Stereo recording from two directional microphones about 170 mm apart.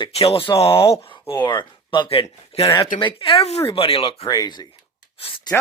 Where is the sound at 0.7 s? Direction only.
15° left (ahead or behind).